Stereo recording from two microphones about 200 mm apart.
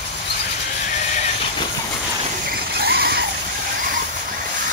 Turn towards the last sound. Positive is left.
turn(degrees=-55)  # may be behind; listen again after turning